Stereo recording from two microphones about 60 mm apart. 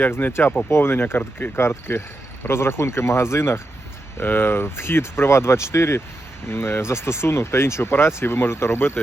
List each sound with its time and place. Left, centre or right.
0.1 s speech: left
4.2 s speech: left